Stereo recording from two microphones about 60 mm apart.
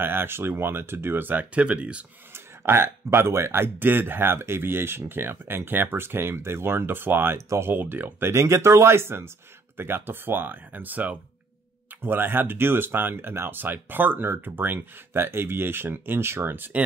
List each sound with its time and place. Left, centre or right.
0.0 s speech: right
2.6 s speech: right
7.3 s speech: right
7.7 s speech: right
8.4 s speech: right